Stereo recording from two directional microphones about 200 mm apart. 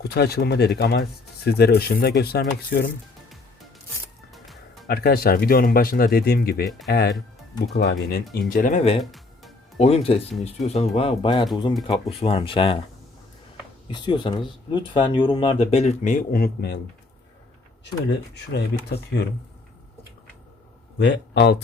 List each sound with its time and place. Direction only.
0.0 s speech: 55° left (ahead or behind)
4.3 s music: centre (ahead or behind)
4.9 s speech: 50° left (ahead or behind)
9.0 s music: centre (ahead or behind)
9.7 s speech: 30° left (ahead or behind)
13.9 s speech: 20° left (ahead or behind); by 16.8 s 55° left (ahead or behind)
18.1 s speech: 55° left (ahead or behind)
21.0 s speech: 60° left (ahead or behind)